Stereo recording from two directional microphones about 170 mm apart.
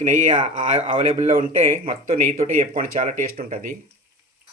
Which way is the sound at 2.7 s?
55° right (ahead or behind).